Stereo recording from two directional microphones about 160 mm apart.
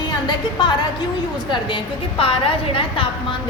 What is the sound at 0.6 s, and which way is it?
A woman's voice, 30° left (ahead or behind).